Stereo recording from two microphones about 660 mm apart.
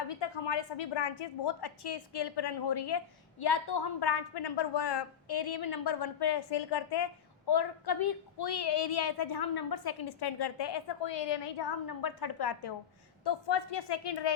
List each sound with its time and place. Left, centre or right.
0.1 s a woman's voice: left